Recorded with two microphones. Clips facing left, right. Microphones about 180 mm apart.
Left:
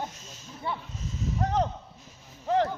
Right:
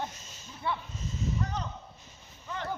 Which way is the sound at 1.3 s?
85° left.